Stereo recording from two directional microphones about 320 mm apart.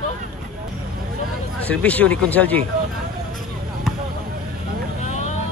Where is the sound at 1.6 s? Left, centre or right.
Centre.